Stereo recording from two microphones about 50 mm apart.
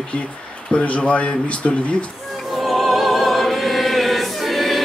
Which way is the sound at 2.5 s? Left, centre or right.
Centre.